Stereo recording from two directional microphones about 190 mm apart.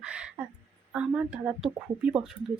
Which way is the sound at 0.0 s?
5° right (ahead or behind).